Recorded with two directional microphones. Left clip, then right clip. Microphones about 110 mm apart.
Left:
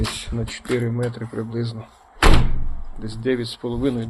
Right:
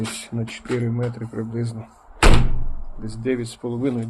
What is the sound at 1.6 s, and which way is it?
Speech, 25° right (ahead or behind).